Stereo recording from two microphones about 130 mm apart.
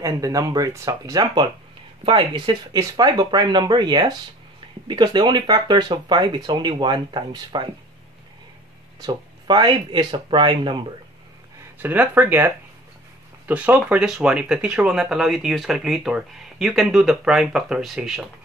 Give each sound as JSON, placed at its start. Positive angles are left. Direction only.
{"t": 0.0, "sound": "speech", "side_deg": -25}
{"t": 9.0, "sound": "speech", "side_deg": -35}
{"t": 11.8, "sound": "speech", "side_deg": -15}